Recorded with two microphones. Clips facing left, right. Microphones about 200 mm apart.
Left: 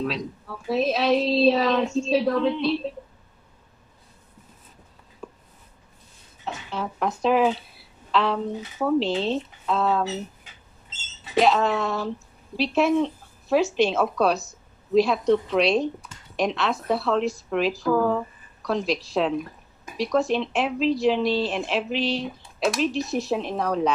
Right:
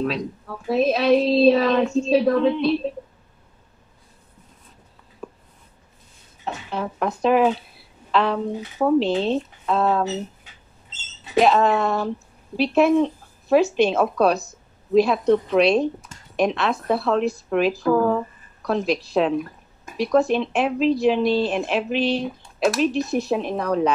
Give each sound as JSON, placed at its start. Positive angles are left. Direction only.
{"t": 0.0, "sound": "a woman's voice", "side_deg": -50}
{"t": 6.4, "sound": "a woman's voice", "side_deg": -55}
{"t": 11.3, "sound": "speech", "side_deg": -55}